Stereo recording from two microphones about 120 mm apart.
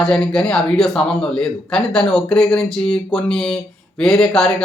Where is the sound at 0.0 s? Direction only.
5° left (ahead or behind).